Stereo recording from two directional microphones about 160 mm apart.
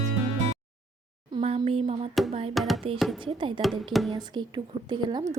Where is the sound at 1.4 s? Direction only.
40° right (ahead or behind).